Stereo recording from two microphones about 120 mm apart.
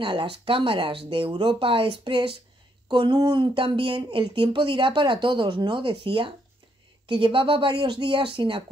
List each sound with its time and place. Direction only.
0.0 s speech: 45° right (ahead or behind)